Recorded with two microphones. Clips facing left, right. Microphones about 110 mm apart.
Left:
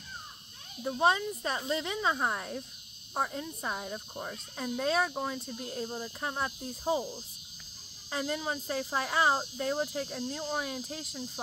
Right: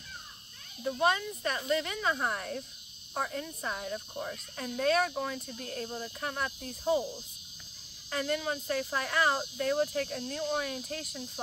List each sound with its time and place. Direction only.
0.8 s speech: 25° left (ahead or behind)
8.1 s speech: 10° left (ahead or behind)
9.6 s speech: 15° left (ahead or behind)